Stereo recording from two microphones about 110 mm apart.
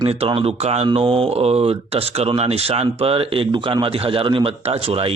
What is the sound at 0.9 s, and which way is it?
Speech, 55° right (ahead or behind).